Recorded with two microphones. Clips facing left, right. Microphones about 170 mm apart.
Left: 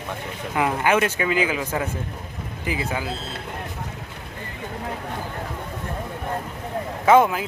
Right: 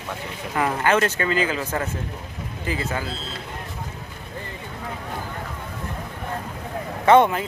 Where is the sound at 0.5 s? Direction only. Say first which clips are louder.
Even; 10° left (ahead or behind).